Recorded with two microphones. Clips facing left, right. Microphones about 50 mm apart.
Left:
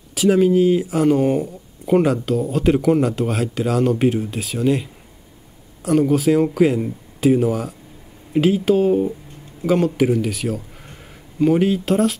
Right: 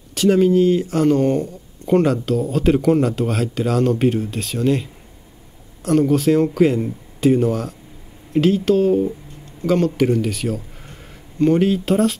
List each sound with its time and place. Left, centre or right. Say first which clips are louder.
0.1 s speech: even; centre